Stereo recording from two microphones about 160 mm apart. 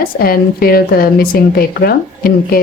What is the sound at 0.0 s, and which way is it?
Speech, 70° left (ahead or behind).